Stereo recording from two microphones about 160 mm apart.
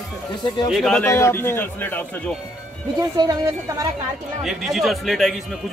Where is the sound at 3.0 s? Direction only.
25° right (ahead or behind).